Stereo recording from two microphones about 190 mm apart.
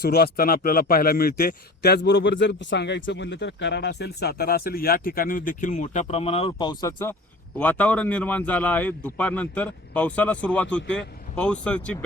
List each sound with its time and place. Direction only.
0.0 s a man's voice: 50° left (ahead or behind); by 11.9 s 5° left (ahead or behind)